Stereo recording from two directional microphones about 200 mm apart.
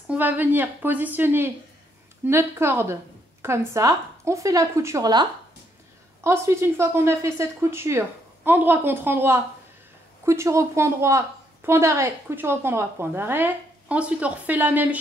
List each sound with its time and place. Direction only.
0.1 s a woman's voice: 10° right (ahead or behind)